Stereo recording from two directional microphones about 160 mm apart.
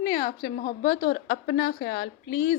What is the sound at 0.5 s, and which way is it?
A woman's voice, 70° left (ahead or behind).